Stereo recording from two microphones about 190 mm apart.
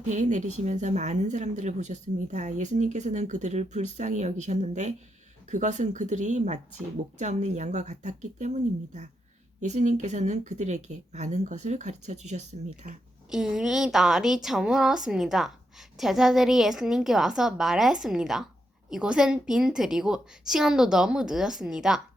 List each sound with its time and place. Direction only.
0.1 s speech: 40° right (ahead or behind)
13.3 s a woman's voice: centre (ahead or behind)